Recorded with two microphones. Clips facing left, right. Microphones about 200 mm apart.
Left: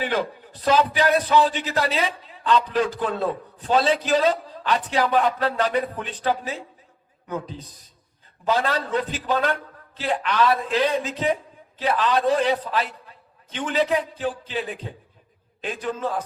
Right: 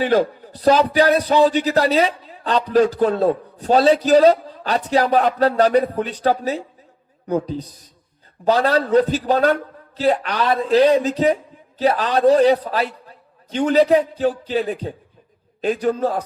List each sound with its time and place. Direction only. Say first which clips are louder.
0.0 s a man's voice: right 8 dB; 40° right (ahead or behind)